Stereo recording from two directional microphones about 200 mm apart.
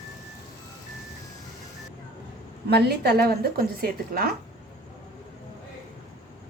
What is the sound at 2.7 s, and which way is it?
Speech, 55° right (ahead or behind).